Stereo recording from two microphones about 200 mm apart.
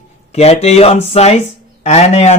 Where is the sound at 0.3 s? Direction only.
30° left (ahead or behind).